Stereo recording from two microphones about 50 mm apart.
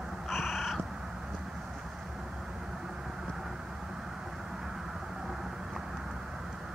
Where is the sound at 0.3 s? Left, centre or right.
Centre.